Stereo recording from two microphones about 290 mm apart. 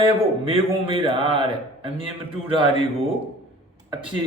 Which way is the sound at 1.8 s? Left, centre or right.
Centre.